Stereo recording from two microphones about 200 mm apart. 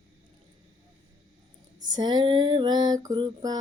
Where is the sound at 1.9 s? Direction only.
20° right (ahead or behind).